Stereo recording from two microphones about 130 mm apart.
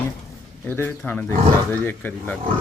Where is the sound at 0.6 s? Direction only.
15° left (ahead or behind).